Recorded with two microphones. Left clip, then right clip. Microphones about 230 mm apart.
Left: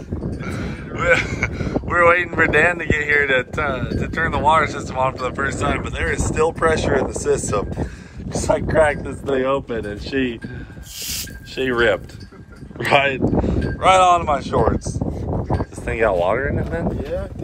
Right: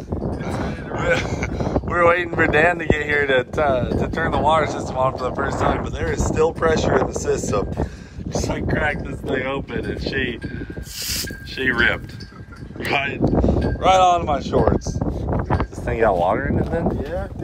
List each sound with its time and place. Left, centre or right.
0.4 s speech: centre
8.6 s speech: centre
11.5 s speech: centre
13.4 s speech: centre